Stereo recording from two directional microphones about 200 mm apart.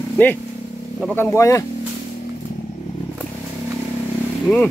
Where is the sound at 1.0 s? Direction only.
10° left (ahead or behind).